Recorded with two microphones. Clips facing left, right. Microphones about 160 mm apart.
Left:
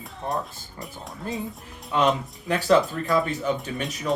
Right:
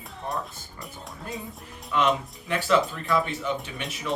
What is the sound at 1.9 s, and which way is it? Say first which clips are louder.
Speech: left 2 dB; 30° left (ahead or behind).